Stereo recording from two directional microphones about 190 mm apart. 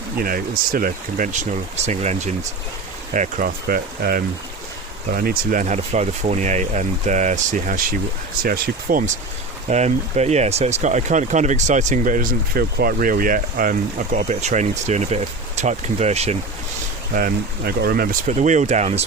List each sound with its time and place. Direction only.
0.2 s speech: 50° right (ahead or behind)
8.4 s speech: 50° right (ahead or behind)
9.6 s speech: 35° right (ahead or behind)
17.2 s speech: 50° right (ahead or behind)